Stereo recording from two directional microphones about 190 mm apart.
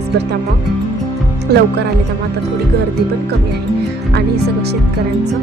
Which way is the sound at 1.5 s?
60° right (ahead or behind).